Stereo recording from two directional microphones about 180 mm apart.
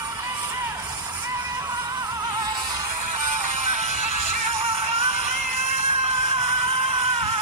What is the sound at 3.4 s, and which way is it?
Music, 40° right (ahead or behind).